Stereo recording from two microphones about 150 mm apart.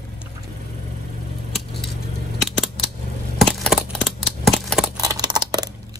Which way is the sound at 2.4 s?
Centre (ahead or behind).